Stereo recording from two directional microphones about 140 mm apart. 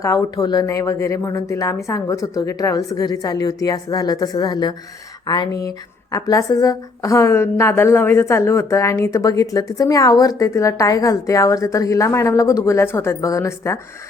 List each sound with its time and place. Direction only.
0.0 s speech: 25° left (ahead or behind)